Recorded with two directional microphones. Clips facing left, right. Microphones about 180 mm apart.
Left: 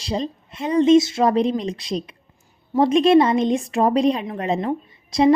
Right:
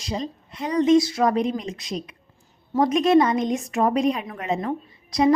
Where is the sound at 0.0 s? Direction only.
30° left (ahead or behind).